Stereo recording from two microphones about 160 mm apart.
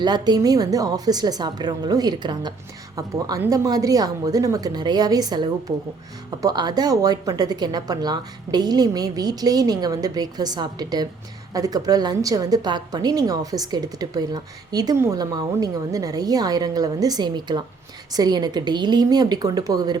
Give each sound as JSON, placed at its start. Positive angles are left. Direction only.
{"t": 0.0, "sound": "a woman's voice", "side_deg": -25}